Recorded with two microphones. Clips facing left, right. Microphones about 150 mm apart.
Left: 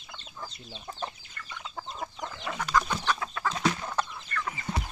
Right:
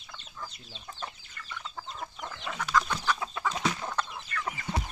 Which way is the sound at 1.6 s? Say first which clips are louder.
Left 3 dB; 10° left (ahead or behind).